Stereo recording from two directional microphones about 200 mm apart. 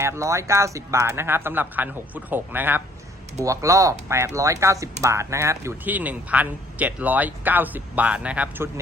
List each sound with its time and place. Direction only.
0.0 s speech: 15° right (ahead or behind)